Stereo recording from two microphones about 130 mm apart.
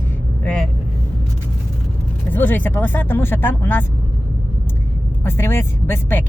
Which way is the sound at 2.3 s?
15° left (ahead or behind).